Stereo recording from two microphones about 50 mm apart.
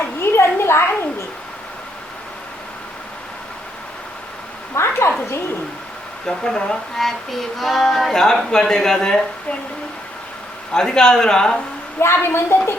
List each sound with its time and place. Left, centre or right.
0.0 s a sound: left
4.7 s a sound: left
6.2 s speech: centre
7.0 s speech: centre
10.7 s speech: centre
11.9 s a woman's voice: left